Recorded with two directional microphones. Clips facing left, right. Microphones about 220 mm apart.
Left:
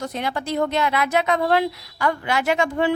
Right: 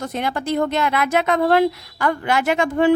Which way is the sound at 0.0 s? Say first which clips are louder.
Right 2 dB; 50° right (ahead or behind).